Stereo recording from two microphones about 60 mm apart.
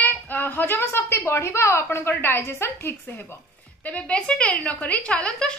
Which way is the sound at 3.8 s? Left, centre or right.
Left.